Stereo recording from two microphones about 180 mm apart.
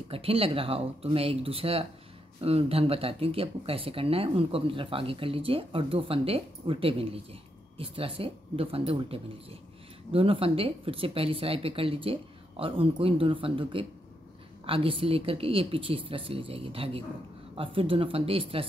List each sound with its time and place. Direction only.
0.1 s speech: 30° right (ahead or behind)